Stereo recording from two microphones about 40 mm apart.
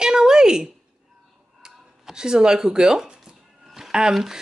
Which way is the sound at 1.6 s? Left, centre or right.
Centre.